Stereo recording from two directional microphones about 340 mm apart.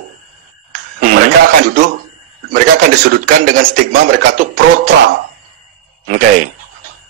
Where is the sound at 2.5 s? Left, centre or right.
Right.